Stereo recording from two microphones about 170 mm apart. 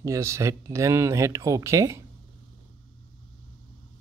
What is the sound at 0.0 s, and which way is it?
Speech, 15° right (ahead or behind).